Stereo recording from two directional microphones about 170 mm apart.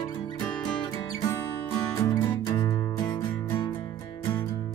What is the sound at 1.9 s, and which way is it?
Music, 20° left (ahead or behind).